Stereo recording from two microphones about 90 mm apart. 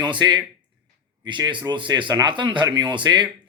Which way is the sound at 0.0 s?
55° right (ahead or behind).